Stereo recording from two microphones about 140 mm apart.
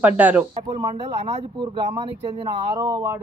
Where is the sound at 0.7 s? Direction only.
40° right (ahead or behind).